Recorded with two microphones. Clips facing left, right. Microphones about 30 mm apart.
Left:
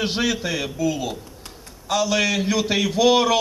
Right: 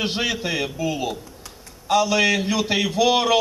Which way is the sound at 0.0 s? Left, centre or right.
Right.